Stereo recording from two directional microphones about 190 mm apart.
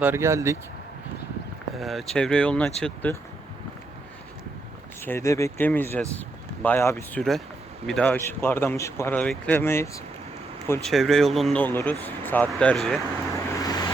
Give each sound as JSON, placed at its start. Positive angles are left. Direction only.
{"t": 0.0, "sound": "speech", "side_deg": -10}
{"t": 1.7, "sound": "speech", "side_deg": 0}
{"t": 5.0, "sound": "speech", "side_deg": 15}
{"t": 10.8, "sound": "speech", "side_deg": 0}
{"t": 13.6, "sound": "vehicle", "side_deg": 20}